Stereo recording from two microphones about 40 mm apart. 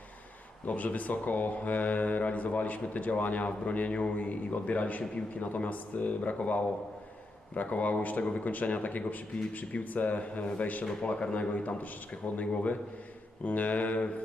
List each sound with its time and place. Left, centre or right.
0.7 s speech: left
8.2 s speech: left
8.4 s speech: left
11.0 s speech: left